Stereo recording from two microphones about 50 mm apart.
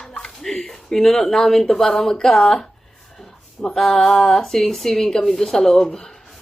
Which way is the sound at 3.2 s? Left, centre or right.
Centre.